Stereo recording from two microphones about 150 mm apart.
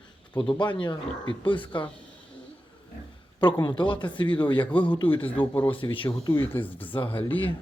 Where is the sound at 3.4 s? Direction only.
30° left (ahead or behind).